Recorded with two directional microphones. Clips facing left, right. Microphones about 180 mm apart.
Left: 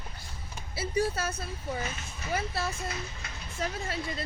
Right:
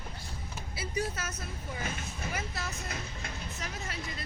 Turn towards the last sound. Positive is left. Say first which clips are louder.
# left 5 dB
turn(degrees=30)  # may be behind; listen again after turning